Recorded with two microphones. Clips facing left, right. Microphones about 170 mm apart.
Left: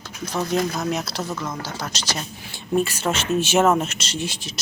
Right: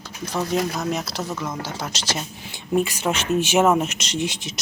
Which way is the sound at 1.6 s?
25° right (ahead or behind).